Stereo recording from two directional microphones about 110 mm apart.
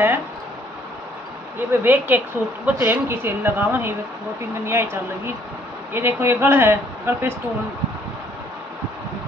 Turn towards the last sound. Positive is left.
turn(degrees=-20)  # may be behind; listen again after turning